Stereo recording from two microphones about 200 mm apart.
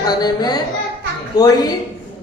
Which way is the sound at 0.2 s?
20° left (ahead or behind).